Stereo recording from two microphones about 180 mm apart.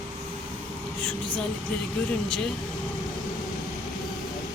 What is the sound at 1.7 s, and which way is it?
Speech, 5° left (ahead or behind).